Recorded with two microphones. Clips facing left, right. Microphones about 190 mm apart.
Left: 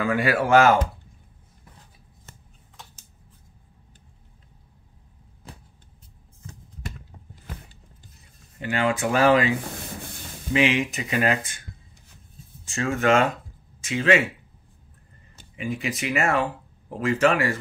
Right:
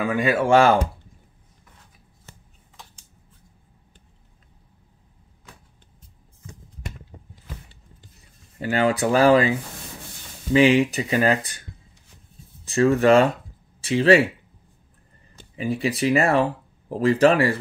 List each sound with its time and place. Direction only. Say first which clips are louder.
0.0 s speech: right 1 dB; 20° right (ahead or behind)
8.5 s speech: right 3 dB; 35° right (ahead or behind)
10.5 s speech: right 6 dB; 35° right (ahead or behind)
12.6 s speech: right 6 dB; 35° right (ahead or behind)
15.5 s speech: right 5 dB; 35° right (ahead or behind)